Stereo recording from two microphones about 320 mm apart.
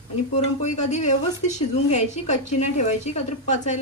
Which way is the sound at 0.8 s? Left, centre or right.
Left.